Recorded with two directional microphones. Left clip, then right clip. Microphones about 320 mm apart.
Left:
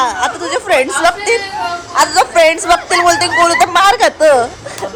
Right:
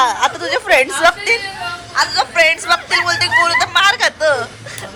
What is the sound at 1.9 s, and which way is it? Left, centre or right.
A man's voice, centre.